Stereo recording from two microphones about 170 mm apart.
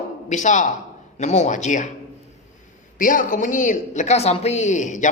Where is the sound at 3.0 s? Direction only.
50° left (ahead or behind).